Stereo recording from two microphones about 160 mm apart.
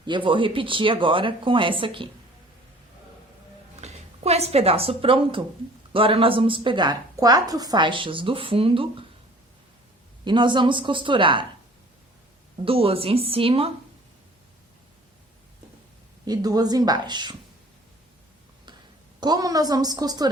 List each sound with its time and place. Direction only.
0.0 s a woman's voice: 30° right (ahead or behind)
3.8 s a sound: 40° right (ahead or behind)
5.9 s a woman's voice: 35° right (ahead or behind)
10.2 s a woman's voice: 30° right (ahead or behind)
12.6 s a woman's voice: 35° right (ahead or behind)
16.2 s speech: 25° right (ahead or behind)
19.2 s speech: 25° right (ahead or behind)